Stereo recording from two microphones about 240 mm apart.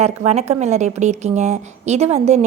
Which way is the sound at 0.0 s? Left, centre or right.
Right.